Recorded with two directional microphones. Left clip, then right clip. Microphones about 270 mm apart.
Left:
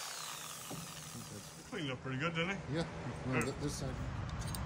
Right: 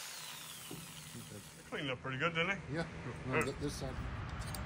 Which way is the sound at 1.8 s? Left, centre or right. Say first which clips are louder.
Right 2 dB; centre.